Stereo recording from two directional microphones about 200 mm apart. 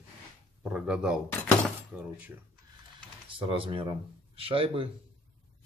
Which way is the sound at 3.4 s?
25° right (ahead or behind).